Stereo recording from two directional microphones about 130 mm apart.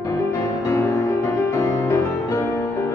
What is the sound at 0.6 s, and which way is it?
Music, 20° left (ahead or behind).